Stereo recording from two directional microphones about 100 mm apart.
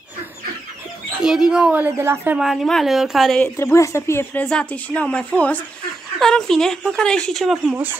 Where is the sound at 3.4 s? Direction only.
25° left (ahead or behind).